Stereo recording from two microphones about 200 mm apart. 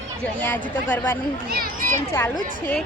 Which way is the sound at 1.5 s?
45° right (ahead or behind).